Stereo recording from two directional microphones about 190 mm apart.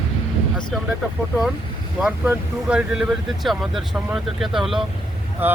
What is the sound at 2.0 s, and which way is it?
Speech, 5° right (ahead or behind).